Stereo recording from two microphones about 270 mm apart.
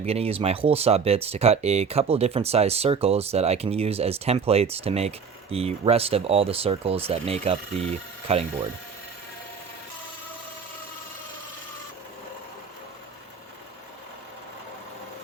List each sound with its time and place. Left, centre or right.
0.0 s speech: right